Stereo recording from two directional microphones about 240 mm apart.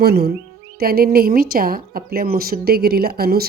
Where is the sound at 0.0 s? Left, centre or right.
Right.